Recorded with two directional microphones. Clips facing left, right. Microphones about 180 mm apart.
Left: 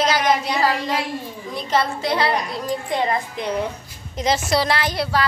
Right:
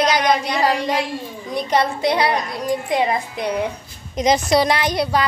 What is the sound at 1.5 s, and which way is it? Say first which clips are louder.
A woman's voice: right 3 dB; 15° right (ahead or behind).